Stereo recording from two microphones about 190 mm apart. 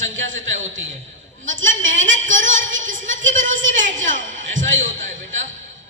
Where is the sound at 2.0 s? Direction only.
40° right (ahead or behind).